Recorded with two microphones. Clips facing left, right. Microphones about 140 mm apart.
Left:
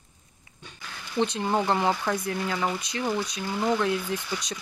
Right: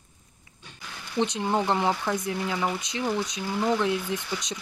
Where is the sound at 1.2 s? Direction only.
20° right (ahead or behind).